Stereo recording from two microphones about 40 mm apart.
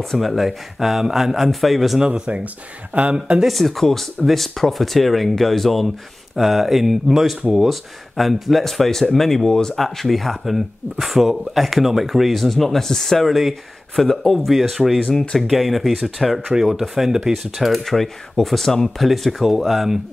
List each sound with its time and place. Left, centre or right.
0.0 s speech: centre
2.0 s speech: right
2.4 s speech: right
3.4 s speech: centre
9.5 s speech: centre
9.8 s speech: centre
13.3 s speech: centre
13.9 s speech: centre
14.4 s speech: centre